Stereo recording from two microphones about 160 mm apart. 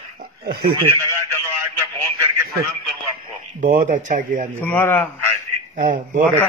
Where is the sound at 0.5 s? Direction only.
70° right (ahead or behind).